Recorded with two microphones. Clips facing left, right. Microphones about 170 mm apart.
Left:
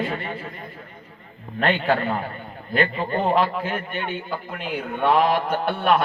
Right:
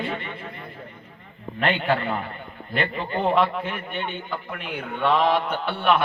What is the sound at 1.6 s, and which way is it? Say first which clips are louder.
Mantra: left 2 dB; 45° left (ahead or behind).